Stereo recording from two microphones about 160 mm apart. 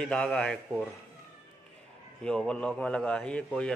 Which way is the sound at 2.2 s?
5° left (ahead or behind).